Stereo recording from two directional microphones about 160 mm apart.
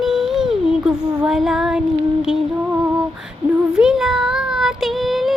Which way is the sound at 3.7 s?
5° right (ahead or behind).